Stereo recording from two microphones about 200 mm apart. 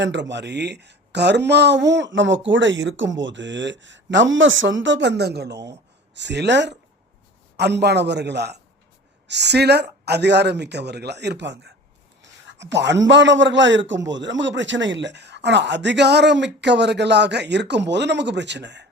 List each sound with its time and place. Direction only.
0.0 s a man's voice: 65° right (ahead or behind)